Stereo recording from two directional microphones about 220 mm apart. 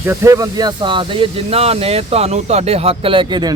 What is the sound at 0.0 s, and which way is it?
Speech, 10° right (ahead or behind).